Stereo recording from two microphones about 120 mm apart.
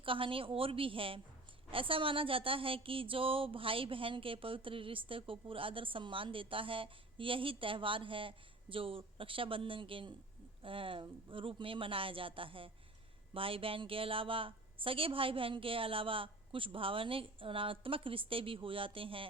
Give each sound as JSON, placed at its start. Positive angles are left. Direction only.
{"t": 0.0, "sound": "a woman's voice", "side_deg": -45}